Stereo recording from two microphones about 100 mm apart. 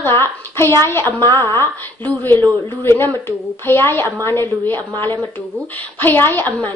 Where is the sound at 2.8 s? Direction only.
25° left (ahead or behind).